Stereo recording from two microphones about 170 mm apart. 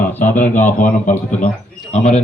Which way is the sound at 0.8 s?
50° left (ahead or behind).